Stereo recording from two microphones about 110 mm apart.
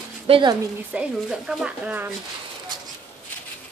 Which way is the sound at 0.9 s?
10° right (ahead or behind).